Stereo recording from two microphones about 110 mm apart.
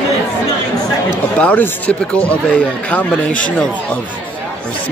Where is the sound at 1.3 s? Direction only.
15° left (ahead or behind).